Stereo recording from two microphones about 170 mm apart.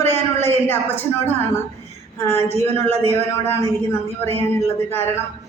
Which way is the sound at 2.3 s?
40° right (ahead or behind).